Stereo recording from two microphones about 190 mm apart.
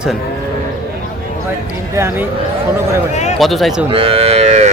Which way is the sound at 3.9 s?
30° right (ahead or behind).